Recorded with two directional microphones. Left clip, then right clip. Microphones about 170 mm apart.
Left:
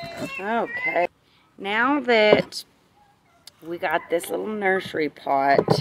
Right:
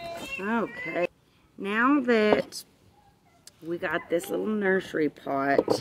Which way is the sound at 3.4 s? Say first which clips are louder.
Left 4 dB; 50° right (ahead or behind).